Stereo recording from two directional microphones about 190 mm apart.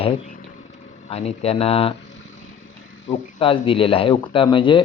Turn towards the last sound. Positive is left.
turn(degrees=25)  # may be behind; listen again after turning